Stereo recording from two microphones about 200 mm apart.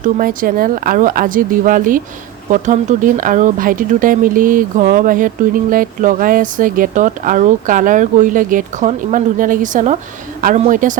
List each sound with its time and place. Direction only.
0.0 s speech: 45° right (ahead or behind)